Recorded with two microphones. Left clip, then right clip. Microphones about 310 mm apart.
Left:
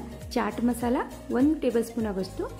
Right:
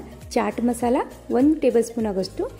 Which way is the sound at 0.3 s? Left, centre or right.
Centre.